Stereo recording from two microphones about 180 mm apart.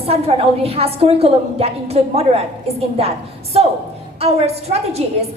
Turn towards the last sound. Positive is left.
turn(degrees=-35)  # may be behind; listen again after turning